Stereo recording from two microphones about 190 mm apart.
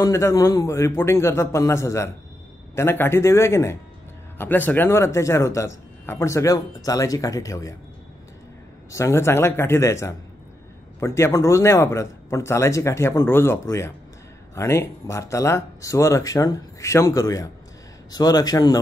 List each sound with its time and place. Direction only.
0.0 s speech: 15° left (ahead or behind)
8.9 s a man's voice: 15° left (ahead or behind)